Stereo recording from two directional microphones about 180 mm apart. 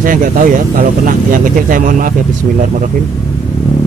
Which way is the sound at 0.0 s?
50° right (ahead or behind).